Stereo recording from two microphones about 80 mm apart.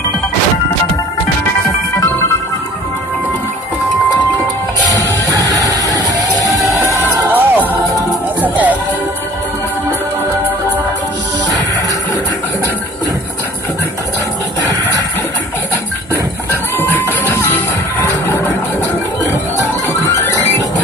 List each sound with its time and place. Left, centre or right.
4.9 s music: right
7.2 s music: right
17.2 s music: left